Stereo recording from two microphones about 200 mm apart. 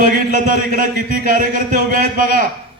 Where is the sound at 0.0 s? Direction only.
40° right (ahead or behind).